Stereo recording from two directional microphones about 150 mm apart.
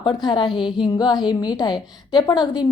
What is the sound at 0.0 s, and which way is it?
A woman's voice, 30° left (ahead or behind).